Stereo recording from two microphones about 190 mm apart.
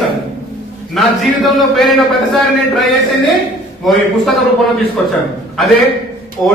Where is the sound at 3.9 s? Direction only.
Centre (ahead or behind).